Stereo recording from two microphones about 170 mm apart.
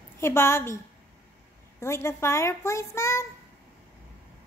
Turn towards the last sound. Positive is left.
turn(degrees=15)  # may be behind; listen again after turning